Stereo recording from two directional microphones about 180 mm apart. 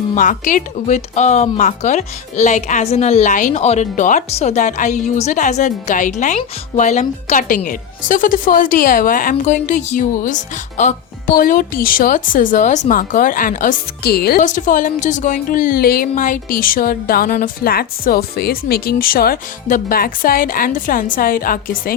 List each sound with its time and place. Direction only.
0.2 s speech: 45° left (ahead or behind)